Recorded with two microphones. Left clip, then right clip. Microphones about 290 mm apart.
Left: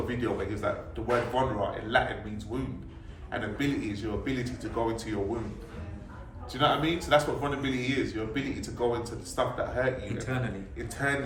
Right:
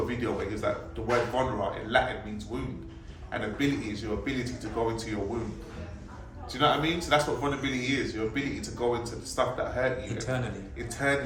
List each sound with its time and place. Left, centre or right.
0.1 s a man's voice: centre
6.5 s a man's voice: centre